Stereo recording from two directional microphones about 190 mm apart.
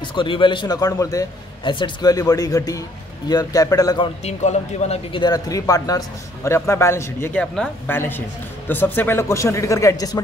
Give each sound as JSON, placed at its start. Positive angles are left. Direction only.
{"t": 0.1, "sound": "a man's voice", "side_deg": 25}
{"t": 4.2, "sound": "speech", "side_deg": 35}